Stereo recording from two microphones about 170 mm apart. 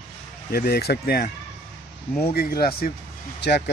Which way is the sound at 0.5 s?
65° left (ahead or behind).